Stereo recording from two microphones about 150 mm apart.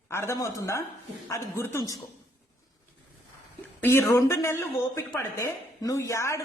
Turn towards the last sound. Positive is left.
turn(degrees=20)  # may be behind; listen again after turning